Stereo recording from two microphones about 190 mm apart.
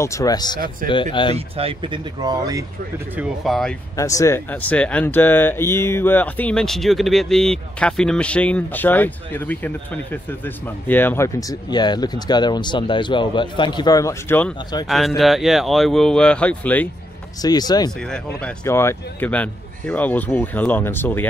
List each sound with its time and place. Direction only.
0.0 s speech: 15° left (ahead or behind)
0.8 s speech: 45° right (ahead or behind)
1.3 s speech: 30° right (ahead or behind)
3.2 s speech: centre (ahead or behind)
3.9 s speech: 15° left (ahead or behind)
14.9 s speech: centre (ahead or behind)
17.4 s speech: 20° left (ahead or behind)
18.1 s speech: 10° left (ahead or behind)